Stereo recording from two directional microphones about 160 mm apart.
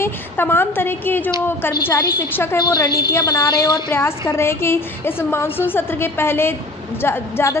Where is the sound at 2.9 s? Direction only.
75° left (ahead or behind).